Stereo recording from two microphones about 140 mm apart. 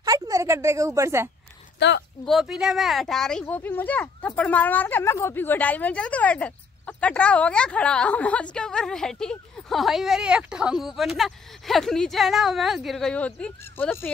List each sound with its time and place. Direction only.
0.0 s a woman's voice: 25° right (ahead or behind)
2.2 s speech: centre (ahead or behind)
3.4 s speech: 15° left (ahead or behind)